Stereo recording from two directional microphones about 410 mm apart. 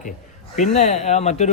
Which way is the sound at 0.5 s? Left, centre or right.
Centre.